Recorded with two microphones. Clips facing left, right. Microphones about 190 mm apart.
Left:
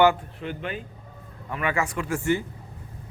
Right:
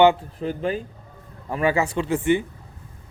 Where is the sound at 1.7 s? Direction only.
25° right (ahead or behind).